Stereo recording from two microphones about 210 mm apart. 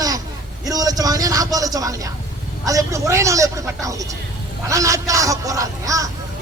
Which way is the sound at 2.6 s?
15° right (ahead or behind).